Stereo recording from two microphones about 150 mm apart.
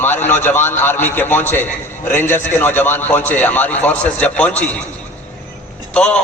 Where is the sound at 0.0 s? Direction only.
15° left (ahead or behind).